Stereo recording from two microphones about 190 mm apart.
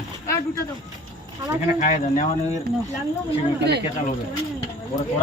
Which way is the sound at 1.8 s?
40° left (ahead or behind).